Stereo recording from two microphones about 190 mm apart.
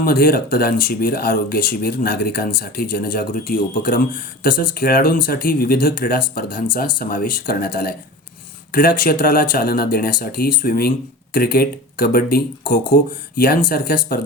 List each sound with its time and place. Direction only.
0.0 s speech: 50° left (ahead or behind)